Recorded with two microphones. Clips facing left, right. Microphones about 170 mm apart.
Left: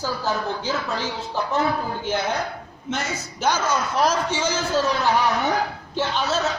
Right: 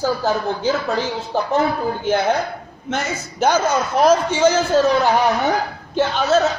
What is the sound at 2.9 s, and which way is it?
Speech, 55° right (ahead or behind).